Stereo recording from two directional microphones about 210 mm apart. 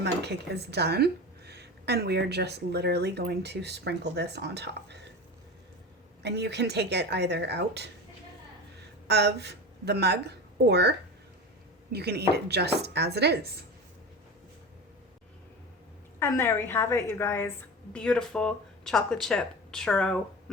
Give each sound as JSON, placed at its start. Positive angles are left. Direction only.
{"t": 0.0, "sound": "speech", "side_deg": -50}
{"t": 6.2, "sound": "speech", "side_deg": -55}
{"t": 9.0, "sound": "a woman's voice", "side_deg": -55}
{"t": 16.2, "sound": "a woman's voice", "side_deg": 10}